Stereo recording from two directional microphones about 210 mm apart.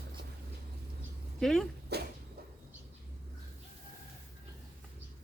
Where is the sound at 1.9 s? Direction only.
50° right (ahead or behind).